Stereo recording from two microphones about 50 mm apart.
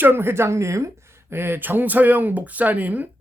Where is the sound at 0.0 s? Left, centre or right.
Right.